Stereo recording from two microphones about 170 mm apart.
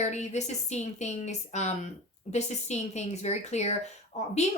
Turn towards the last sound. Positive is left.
turn(degrees=40)  # may be behind; listen again after turning